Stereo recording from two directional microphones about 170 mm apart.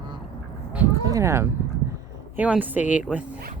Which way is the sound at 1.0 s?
20° right (ahead or behind).